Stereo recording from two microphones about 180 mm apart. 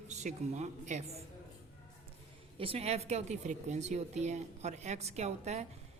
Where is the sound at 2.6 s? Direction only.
30° right (ahead or behind).